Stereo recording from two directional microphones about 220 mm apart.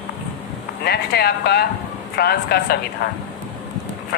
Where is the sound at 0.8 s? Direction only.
45° left (ahead or behind).